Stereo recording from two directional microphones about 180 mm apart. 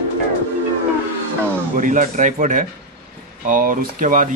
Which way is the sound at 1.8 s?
45° right (ahead or behind).